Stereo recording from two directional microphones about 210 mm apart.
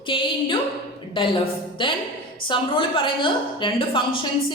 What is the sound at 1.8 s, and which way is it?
A woman's voice, 25° left (ahead or behind).